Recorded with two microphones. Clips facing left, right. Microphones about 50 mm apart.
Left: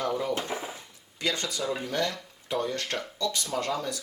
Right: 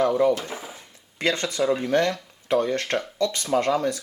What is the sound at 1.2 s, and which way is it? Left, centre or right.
Speech, right.